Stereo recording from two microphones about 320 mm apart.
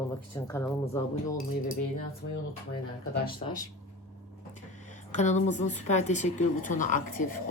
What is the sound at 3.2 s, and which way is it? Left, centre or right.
Speech, left.